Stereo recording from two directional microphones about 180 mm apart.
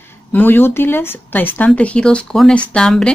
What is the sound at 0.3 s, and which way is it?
Speech, 10° left (ahead or behind).